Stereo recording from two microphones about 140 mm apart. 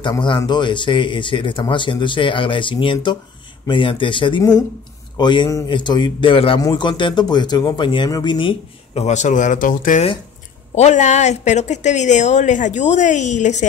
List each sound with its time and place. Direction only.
0.4 s speech: 30° left (ahead or behind)
9.0 s speech: 60° left (ahead or behind)
10.7 s speech: 55° left (ahead or behind)